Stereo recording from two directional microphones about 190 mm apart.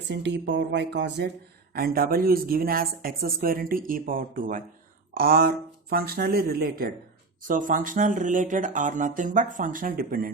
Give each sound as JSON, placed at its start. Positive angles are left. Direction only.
{"t": 0.1, "sound": "speech", "side_deg": -65}
{"t": 1.7, "sound": "speech", "side_deg": -50}